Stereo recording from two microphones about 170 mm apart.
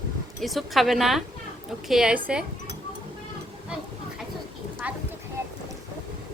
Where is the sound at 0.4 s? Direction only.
Centre (ahead or behind).